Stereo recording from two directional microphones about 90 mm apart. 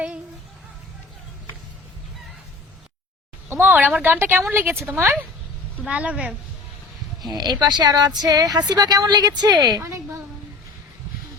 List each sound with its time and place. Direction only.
3.5 s speech: 20° right (ahead or behind)
5.9 s speech: 15° right (ahead or behind)
7.2 s speech: 50° right (ahead or behind)
9.8 s a woman's voice: 30° right (ahead or behind)